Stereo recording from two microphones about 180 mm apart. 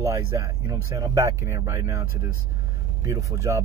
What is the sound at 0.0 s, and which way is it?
Speech, 15° right (ahead or behind).